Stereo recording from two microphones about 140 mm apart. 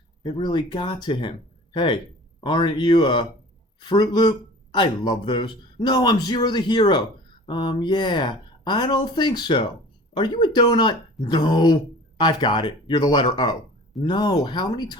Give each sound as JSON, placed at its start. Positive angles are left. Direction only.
{"t": 0.2, "sound": "speech", "side_deg": 35}